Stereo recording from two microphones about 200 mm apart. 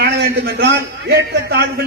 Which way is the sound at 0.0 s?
55° right (ahead or behind).